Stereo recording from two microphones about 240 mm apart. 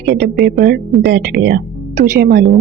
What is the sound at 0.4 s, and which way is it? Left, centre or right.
Speech, right.